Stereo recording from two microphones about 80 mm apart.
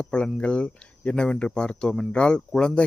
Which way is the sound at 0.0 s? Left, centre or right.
Centre.